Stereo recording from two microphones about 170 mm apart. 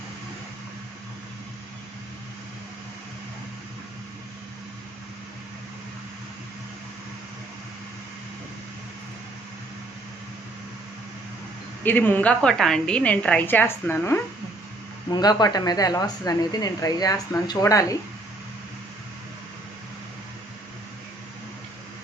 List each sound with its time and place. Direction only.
11.8 s a woman's voice: 10° left (ahead or behind)
15.1 s speech: 25° left (ahead or behind)